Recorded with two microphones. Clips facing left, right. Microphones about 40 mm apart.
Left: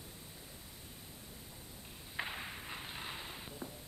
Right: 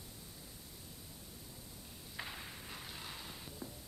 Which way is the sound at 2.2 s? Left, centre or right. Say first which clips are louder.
Left 5 dB; left.